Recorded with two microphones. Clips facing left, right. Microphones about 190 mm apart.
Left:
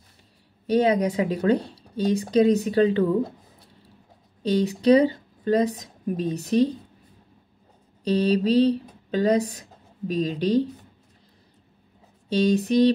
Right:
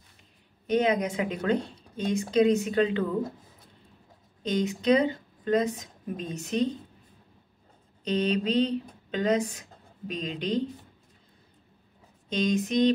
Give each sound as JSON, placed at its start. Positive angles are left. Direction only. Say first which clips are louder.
{"t": 0.7, "sound": "a woman's voice", "louder": "left 4 dB", "side_deg": 35}
{"t": 4.5, "sound": "a woman's voice", "louder": "left 5 dB", "side_deg": 35}
{"t": 8.0, "sound": "speech", "louder": "left 5 dB", "side_deg": 35}
{"t": 12.3, "sound": "a woman's voice", "louder": "left 6 dB", "side_deg": 35}